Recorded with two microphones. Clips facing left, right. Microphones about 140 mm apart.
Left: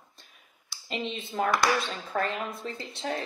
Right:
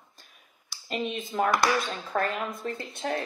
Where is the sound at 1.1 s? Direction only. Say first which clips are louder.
Right 1 dB; 45° right (ahead or behind).